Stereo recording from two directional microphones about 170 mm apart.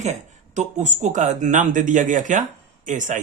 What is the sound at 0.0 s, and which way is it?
Speech, 45° right (ahead or behind).